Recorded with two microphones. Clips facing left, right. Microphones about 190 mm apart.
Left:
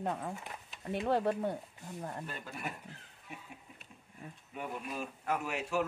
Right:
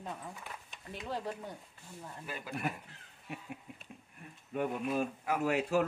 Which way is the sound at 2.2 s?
5° right (ahead or behind).